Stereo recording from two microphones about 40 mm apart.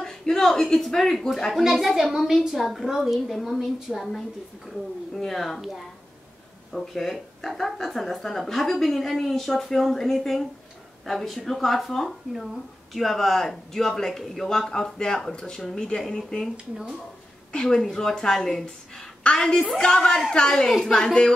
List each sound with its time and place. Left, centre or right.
0.0 s a woman's voice: centre
1.6 s a woman's voice: centre
6.7 s a woman's voice: centre
14.6 s speech: centre